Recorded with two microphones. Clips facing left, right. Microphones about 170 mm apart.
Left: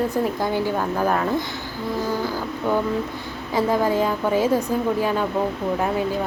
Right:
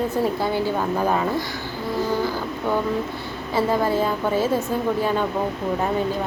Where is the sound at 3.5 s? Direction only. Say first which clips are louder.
Left 1 dB; 15° left (ahead or behind).